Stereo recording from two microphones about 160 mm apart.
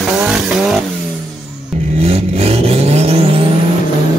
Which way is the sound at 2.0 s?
40° right (ahead or behind).